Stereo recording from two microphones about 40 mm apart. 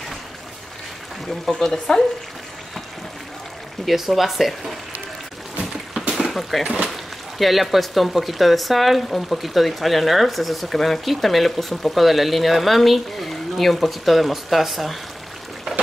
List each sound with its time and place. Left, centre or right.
1.4 s speech: centre
3.8 s speech: centre
5.6 s boat: centre
6.1 s a sound: centre
6.9 s speech: centre